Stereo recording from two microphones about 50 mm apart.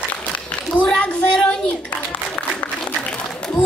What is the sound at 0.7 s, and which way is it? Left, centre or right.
A child's voice, left.